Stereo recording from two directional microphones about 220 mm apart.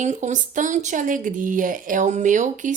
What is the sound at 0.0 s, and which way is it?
A woman's voice, 35° right (ahead or behind).